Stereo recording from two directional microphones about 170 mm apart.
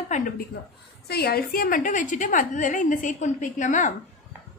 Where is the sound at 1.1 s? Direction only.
65° left (ahead or behind); by 3.9 s 45° left (ahead or behind).